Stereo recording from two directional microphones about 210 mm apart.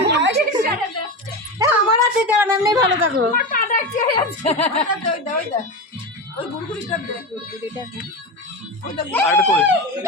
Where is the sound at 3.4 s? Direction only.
40° left (ahead or behind).